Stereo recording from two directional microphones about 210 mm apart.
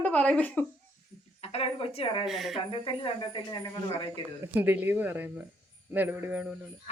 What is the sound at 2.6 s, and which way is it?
Speech, 25° left (ahead or behind).